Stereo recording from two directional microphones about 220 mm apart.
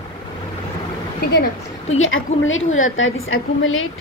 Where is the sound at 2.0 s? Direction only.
65° left (ahead or behind).